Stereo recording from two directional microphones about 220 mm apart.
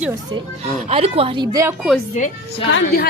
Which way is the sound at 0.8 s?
25° right (ahead or behind).